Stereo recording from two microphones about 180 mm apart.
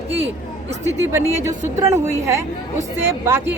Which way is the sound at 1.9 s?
15° right (ahead or behind).